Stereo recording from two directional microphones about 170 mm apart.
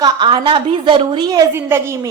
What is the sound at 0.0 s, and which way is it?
A woman's voice, 25° right (ahead or behind).